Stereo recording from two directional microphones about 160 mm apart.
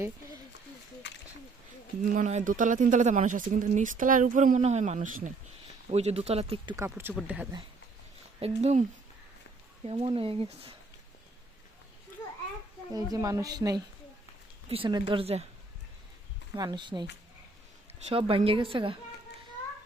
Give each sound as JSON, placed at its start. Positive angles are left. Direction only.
{"t": 1.0, "sound": "a sound", "side_deg": 90}
{"t": 2.1, "sound": "speech", "side_deg": -50}
{"t": 5.9, "sound": "speech", "side_deg": -40}
{"t": 6.7, "sound": "speech", "side_deg": -15}
{"t": 8.4, "sound": "speech", "side_deg": -40}
{"t": 12.9, "sound": "speech", "side_deg": -25}
{"t": 16.6, "sound": "speech", "side_deg": -25}
{"t": 18.1, "sound": "speech", "side_deg": -35}